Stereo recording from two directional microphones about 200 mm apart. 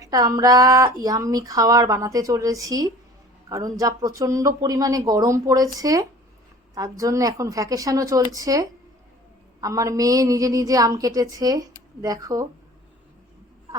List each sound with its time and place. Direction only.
0.0 s speech: 15° right (ahead or behind)